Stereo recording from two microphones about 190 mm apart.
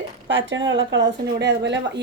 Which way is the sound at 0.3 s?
75° right (ahead or behind).